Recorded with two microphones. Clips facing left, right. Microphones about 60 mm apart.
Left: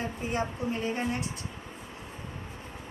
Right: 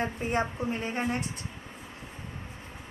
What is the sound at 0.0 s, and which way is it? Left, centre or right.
A woman's voice, right.